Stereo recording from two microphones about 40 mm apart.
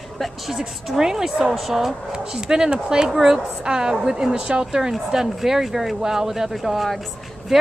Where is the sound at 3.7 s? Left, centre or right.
Centre.